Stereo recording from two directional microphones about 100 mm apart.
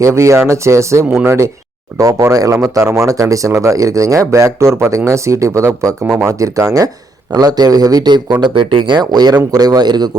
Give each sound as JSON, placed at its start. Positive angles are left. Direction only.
{"t": 0.0, "sound": "speech", "side_deg": -30}
{"t": 2.0, "sound": "speech", "side_deg": -35}